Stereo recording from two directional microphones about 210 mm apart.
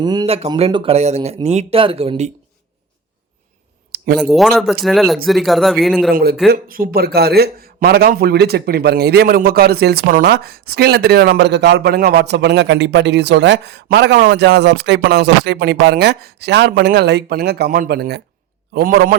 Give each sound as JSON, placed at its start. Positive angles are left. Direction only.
{"t": 0.0, "sound": "speech", "side_deg": -20}
{"t": 4.2, "sound": "speech", "side_deg": 0}
{"t": 6.5, "sound": "a man's voice", "side_deg": -45}